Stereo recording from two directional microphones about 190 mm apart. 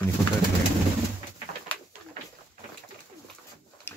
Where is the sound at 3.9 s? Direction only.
10° left (ahead or behind).